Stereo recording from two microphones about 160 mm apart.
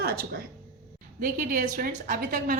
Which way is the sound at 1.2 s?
55° right (ahead or behind).